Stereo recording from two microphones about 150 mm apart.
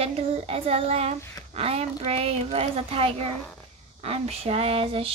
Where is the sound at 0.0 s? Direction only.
40° right (ahead or behind).